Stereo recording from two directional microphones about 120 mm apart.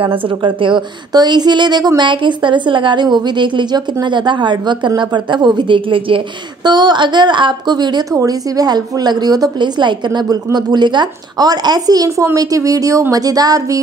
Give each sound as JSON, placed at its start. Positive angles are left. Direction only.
{"t": 0.0, "sound": "a woman's voice", "side_deg": -45}